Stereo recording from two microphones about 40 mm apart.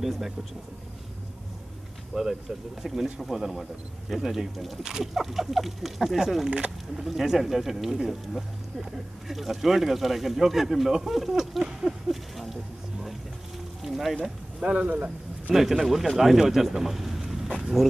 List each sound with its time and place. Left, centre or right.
0.0 s speech: centre
2.1 s speech: centre
13.8 s speech: centre
14.6 s speech: right
14.9 s a man's voice: right
15.5 s speech: centre